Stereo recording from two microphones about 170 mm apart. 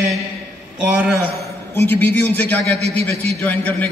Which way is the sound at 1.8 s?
10° left (ahead or behind).